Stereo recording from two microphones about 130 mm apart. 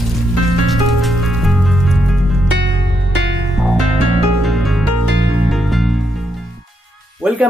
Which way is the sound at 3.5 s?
Centre (ahead or behind).